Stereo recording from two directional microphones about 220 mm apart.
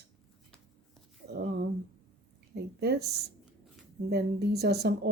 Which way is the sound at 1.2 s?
50° right (ahead or behind).